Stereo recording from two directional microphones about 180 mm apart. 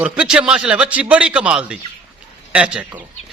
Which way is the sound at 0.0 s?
5° right (ahead or behind).